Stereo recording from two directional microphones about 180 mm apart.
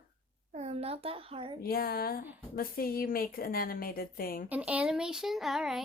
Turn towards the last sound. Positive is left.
turn(degrees=0)  # may be behind; listen again after turning